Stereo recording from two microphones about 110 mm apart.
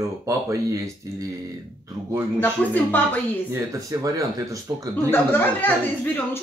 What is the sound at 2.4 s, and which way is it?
Speech, 15° left (ahead or behind).